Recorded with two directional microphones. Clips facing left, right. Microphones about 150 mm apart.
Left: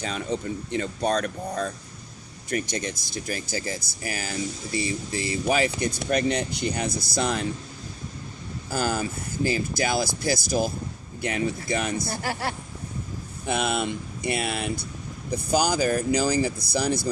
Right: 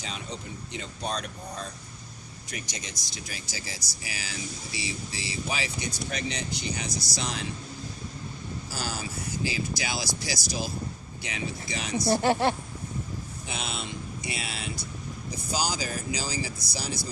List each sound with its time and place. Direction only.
0.0 s speech: 55° left (ahead or behind)
8.7 s speech: 55° left (ahead or behind)
12.0 s a woman's voice: 25° right (ahead or behind)
13.4 s speech: 55° left (ahead or behind)